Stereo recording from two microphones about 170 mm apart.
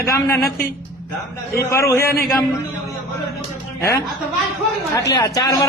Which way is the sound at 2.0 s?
60° left (ahead or behind).